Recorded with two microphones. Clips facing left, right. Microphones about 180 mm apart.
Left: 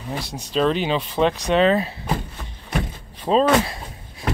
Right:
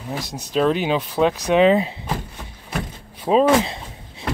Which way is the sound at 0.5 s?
10° right (ahead or behind).